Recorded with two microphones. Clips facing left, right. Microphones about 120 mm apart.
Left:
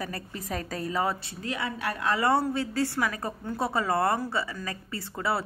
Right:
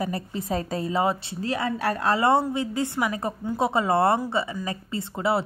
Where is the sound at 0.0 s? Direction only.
25° right (ahead or behind).